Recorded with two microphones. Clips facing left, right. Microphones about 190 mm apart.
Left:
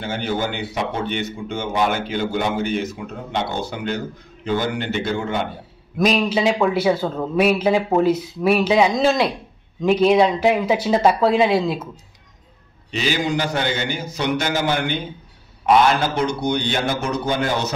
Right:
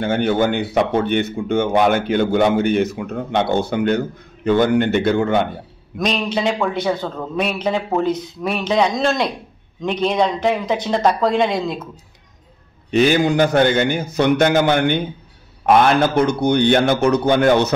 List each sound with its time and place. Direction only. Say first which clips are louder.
0.0 s a man's voice: right 7 dB; 60° right (ahead or behind)
5.9 s a man's voice: left 2 dB; 5° left (ahead or behind)
12.9 s a man's voice: right 7 dB; 55° right (ahead or behind)